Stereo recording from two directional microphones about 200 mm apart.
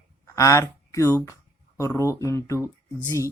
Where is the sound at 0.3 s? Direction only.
15° left (ahead or behind).